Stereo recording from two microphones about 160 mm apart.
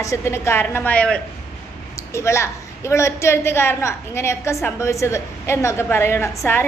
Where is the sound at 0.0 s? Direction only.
20° left (ahead or behind).